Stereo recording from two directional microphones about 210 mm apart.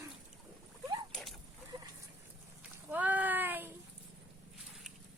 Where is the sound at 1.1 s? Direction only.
Centre (ahead or behind).